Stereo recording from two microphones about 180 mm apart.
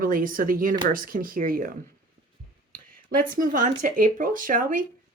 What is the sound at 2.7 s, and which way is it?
Speech, 50° right (ahead or behind).